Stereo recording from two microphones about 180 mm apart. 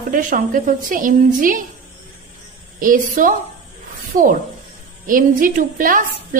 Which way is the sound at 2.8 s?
50° right (ahead or behind).